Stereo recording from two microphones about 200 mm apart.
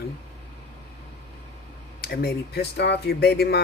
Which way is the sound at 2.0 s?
50° left (ahead or behind).